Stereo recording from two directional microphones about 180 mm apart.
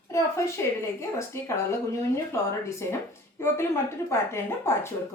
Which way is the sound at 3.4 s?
15° left (ahead or behind).